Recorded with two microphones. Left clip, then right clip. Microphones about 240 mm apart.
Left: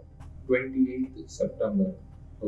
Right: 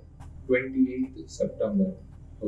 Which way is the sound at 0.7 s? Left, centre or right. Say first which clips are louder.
Right 1 dB; centre.